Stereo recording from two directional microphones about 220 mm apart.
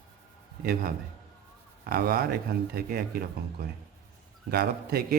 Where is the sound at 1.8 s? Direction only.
40° right (ahead or behind).